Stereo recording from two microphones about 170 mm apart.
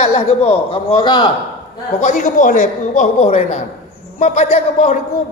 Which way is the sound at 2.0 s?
45° left (ahead or behind).